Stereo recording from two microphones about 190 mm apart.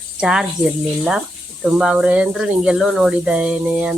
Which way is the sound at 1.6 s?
5° right (ahead or behind).